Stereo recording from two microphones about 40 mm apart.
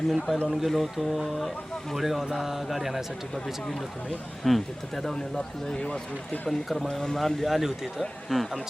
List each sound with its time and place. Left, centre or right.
0.1 s speech: centre
3.3 s speech: centre
6.5 s speech: centre
6.9 s speech: centre